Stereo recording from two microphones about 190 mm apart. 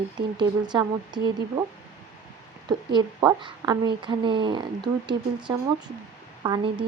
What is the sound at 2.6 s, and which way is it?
Speech, 20° right (ahead or behind).